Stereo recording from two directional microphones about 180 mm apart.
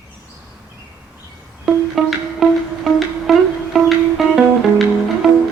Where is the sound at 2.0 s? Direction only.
Centre (ahead or behind).